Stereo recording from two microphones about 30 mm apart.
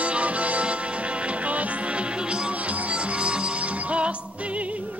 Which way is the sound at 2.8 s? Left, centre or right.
Right.